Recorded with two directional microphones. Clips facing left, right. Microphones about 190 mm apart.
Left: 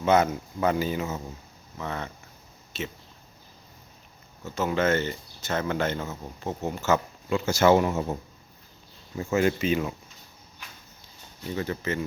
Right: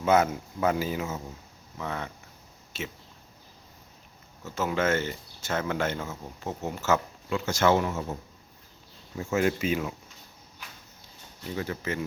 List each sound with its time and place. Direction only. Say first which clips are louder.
0.0 s speech: left 1 dB; 5° right (ahead or behind)
4.4 s speech: left 2 dB; 5° right (ahead or behind); by 7.9 s 10° left (ahead or behind)
7.9 s speech: left 4 dB; 25° left (ahead or behind)
9.1 s speech: left 2 dB; centre (ahead or behind)
11.5 s speech: left 2 dB; 5° right (ahead or behind)